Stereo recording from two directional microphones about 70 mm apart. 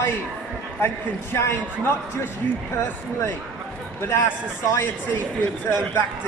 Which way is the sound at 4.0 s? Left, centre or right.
Left.